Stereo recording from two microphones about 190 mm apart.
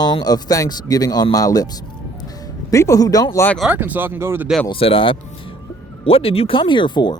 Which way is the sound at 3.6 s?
10° right (ahead or behind).